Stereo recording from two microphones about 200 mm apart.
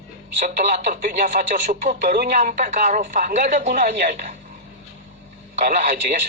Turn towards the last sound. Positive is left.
turn(degrees=-40)  # may be behind; listen again after turning